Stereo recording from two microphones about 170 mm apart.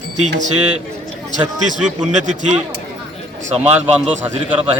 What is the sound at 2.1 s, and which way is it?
Speech, 45° right (ahead or behind).